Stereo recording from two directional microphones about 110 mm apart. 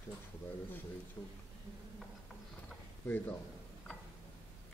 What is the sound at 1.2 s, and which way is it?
Speech, 15° left (ahead or behind).